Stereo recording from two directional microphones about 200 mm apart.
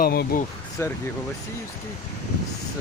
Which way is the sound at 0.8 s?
15° left (ahead or behind).